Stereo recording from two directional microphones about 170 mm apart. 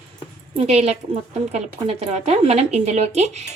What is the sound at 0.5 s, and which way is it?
A woman's voice, 35° right (ahead or behind).